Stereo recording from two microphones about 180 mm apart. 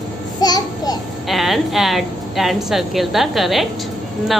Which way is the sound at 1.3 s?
Centre (ahead or behind).